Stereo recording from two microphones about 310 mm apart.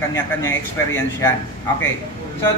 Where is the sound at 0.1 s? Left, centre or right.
Centre.